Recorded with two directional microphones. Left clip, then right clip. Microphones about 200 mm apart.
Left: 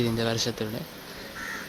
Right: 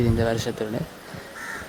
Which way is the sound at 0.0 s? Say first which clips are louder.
Right 3 dB; 20° right (ahead or behind).